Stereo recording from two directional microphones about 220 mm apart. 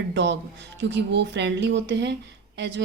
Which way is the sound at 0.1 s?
50° right (ahead or behind).